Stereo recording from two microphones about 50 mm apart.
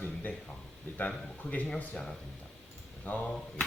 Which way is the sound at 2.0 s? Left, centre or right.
Left.